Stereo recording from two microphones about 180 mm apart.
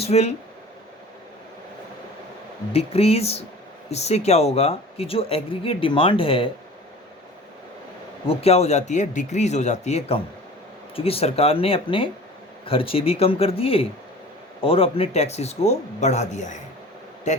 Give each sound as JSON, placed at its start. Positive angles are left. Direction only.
{"t": 0.0, "sound": "speech", "side_deg": 35}
{"t": 2.7, "sound": "speech", "side_deg": 35}
{"t": 8.3, "sound": "speech", "side_deg": 35}